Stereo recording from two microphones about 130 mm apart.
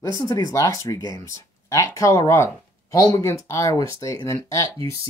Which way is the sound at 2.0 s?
25° left (ahead or behind).